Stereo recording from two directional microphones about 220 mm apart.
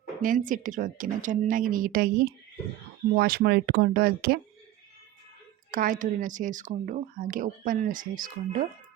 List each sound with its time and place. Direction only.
0.2 s a woman's voice: 35° right (ahead or behind)
5.7 s a woman's voice: 40° right (ahead or behind)